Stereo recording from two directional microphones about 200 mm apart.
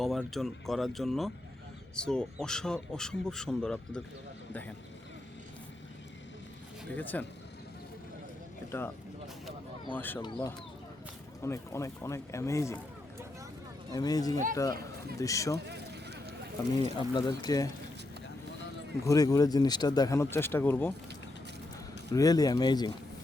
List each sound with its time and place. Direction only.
0.0 s speech: centre (ahead or behind)
6.9 s speech: 10° left (ahead or behind)
8.7 s speech: 10° left (ahead or behind)
9.9 s speech: 10° left (ahead or behind)
11.4 s speech: 15° left (ahead or behind)
13.9 s speech: 20° left (ahead or behind)
15.5 s a sound: 55° right (ahead or behind)
17.0 s speech: 20° left (ahead or behind)
19.0 s speech: 15° left (ahead or behind)
22.1 s speech: 20° left (ahead or behind)